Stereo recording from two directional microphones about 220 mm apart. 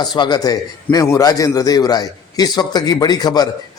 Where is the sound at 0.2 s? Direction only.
20° left (ahead or behind).